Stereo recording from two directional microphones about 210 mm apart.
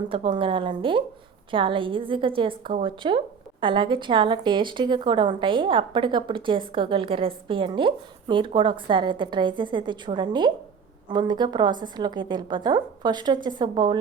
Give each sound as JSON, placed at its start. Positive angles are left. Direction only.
{"t": 0.1, "sound": "a woman's voice", "side_deg": -25}